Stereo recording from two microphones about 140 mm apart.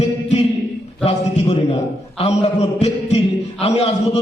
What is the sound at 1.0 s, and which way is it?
A man's voice, 50° left (ahead or behind).